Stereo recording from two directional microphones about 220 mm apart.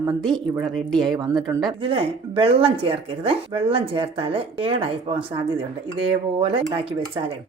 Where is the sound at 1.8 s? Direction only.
25° right (ahead or behind).